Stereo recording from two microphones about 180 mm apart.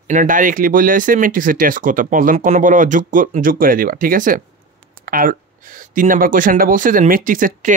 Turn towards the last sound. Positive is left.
turn(degrees=-50)  # may be behind; listen again after turning